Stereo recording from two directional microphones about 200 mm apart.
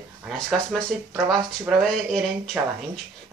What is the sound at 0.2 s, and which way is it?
Speech, centre (ahead or behind).